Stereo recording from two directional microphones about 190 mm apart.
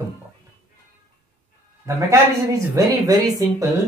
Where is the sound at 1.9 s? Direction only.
15° right (ahead or behind).